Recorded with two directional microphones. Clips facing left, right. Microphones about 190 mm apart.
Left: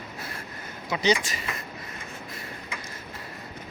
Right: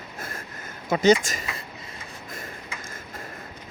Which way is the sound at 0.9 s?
50° right (ahead or behind).